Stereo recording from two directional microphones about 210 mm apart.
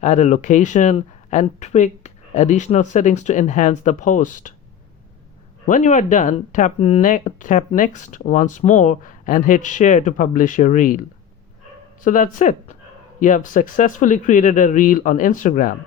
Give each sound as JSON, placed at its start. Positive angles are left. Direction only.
{"t": 0.0, "sound": "speech", "side_deg": 35}
{"t": 5.6, "sound": "speech", "side_deg": 35}
{"t": 12.0, "sound": "speech", "side_deg": 40}